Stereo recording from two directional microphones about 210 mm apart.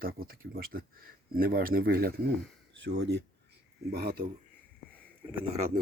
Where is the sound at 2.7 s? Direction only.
55° right (ahead or behind).